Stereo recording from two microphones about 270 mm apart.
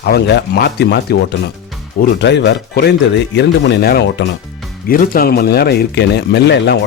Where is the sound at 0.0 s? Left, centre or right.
Left.